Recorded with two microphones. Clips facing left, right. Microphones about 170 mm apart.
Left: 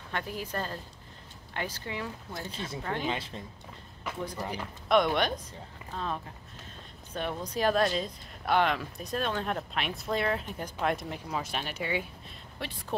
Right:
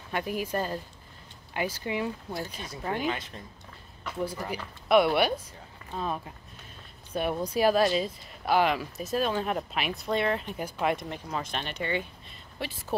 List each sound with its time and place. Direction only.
0.1 s speech: 10° right (ahead or behind)
2.3 s speech: 25° left (ahead or behind)
2.8 s speech: 10° right (ahead or behind)
3.1 s speech: 25° left (ahead or behind)
4.5 s speech: 5° right (ahead or behind)